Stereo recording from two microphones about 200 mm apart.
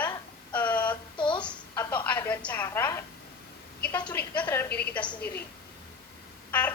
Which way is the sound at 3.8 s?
5° left (ahead or behind).